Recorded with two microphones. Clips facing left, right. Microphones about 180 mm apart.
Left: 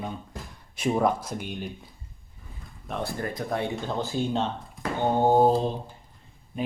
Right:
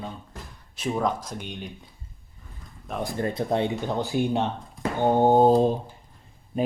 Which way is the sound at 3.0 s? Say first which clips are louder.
Right 4 dB; 20° right (ahead or behind).